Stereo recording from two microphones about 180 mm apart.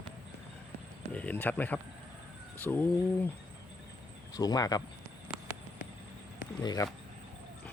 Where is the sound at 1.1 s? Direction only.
10° left (ahead or behind).